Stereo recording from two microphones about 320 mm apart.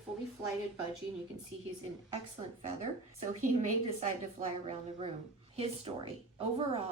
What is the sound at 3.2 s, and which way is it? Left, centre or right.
Speech, right.